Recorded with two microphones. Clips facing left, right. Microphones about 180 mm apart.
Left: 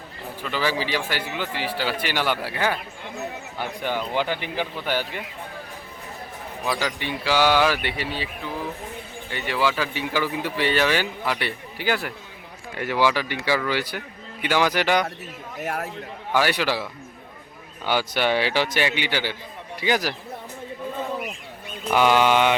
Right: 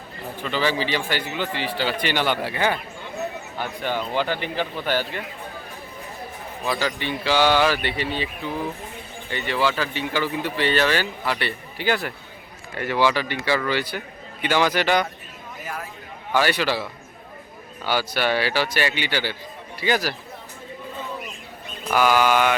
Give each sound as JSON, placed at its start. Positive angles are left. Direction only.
{"t": 0.4, "sound": "a man's voice", "side_deg": 10}
{"t": 3.8, "sound": "a man's voice", "side_deg": 15}
{"t": 6.7, "sound": "a man's voice", "side_deg": 10}
{"t": 9.3, "sound": "a man's voice", "side_deg": 10}
{"t": 15.6, "sound": "a man's voice", "side_deg": 65}
{"t": 16.3, "sound": "a man's voice", "side_deg": 10}
{"t": 21.9, "sound": "a man's voice", "side_deg": 25}